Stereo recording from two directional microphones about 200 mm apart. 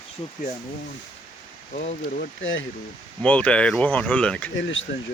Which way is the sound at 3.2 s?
5° left (ahead or behind).